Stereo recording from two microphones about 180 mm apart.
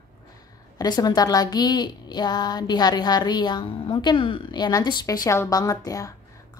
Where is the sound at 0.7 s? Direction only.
20° left (ahead or behind).